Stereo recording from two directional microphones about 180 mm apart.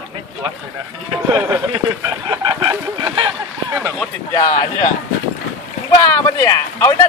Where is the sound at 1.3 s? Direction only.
25° right (ahead or behind).